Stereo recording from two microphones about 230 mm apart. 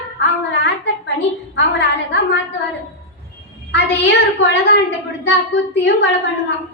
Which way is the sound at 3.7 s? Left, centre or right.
Left.